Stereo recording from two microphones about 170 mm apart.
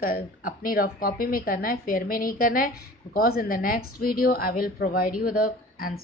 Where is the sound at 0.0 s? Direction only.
55° left (ahead or behind).